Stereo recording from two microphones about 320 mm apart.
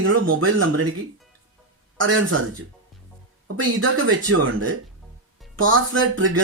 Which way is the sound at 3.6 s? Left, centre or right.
Right.